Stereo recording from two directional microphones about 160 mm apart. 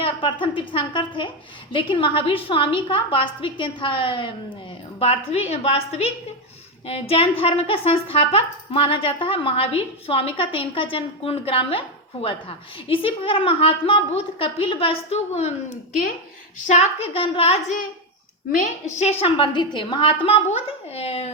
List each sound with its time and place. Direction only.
0.0 s speech: 30° left (ahead or behind)
18.5 s a woman's voice: 50° left (ahead or behind)
19.2 s speech: 30° left (ahead or behind)